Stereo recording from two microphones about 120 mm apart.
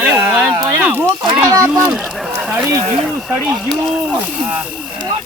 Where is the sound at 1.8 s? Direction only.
5° right (ahead or behind).